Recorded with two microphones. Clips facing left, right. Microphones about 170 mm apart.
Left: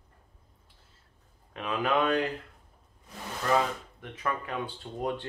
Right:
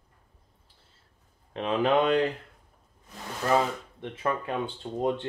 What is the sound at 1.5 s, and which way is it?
Speech, 30° right (ahead or behind).